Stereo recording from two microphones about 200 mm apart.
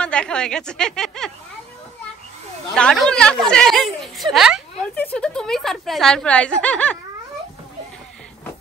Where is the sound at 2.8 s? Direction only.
5° left (ahead or behind).